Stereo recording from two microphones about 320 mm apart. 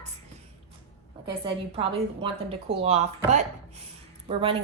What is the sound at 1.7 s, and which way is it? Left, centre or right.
A woman's voice, centre.